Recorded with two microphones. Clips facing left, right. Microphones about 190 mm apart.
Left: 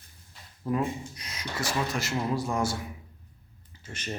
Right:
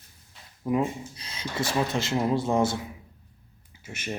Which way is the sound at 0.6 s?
15° right (ahead or behind).